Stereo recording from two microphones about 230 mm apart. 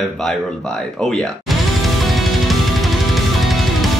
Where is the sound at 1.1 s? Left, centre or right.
Centre.